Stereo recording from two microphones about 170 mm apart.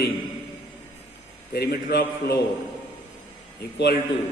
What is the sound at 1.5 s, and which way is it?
Speech, 65° left (ahead or behind).